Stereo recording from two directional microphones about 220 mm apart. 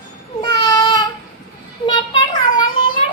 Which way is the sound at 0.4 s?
15° left (ahead or behind).